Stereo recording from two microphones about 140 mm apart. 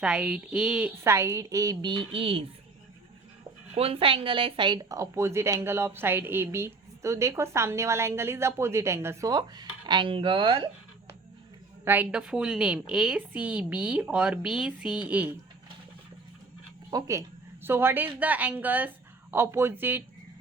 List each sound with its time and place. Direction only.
0.0 s a woman's voice: 5° right (ahead or behind)
1.0 s a woman's voice: 20° right (ahead or behind); by 2.5 s 40° right (ahead or behind)
3.8 s a woman's voice: 40° right (ahead or behind); by 9.3 s 20° right (ahead or behind)
9.3 s speech: 30° right (ahead or behind)
11.9 s a woman's voice: 10° right (ahead or behind)
16.9 s a woman's voice: 20° right (ahead or behind)